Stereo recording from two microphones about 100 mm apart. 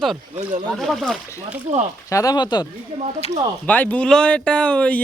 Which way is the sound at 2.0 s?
35° left (ahead or behind).